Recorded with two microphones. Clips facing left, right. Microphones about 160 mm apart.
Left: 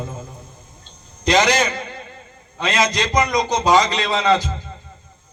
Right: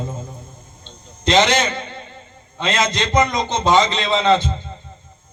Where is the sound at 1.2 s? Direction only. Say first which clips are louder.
Right 1 dB; 25° right (ahead or behind).